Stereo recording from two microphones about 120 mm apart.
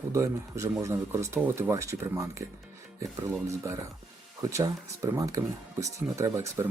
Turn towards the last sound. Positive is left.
turn(degrees=-25)  # may be behind; listen again after turning